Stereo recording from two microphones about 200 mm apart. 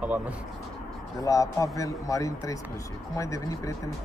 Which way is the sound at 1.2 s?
15° left (ahead or behind).